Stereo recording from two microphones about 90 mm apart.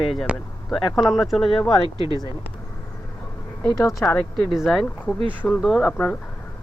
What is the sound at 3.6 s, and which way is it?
Speech, 40° left (ahead or behind).